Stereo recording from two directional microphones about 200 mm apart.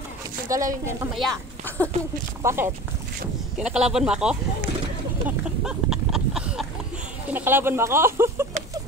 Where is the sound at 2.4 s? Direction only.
15° right (ahead or behind).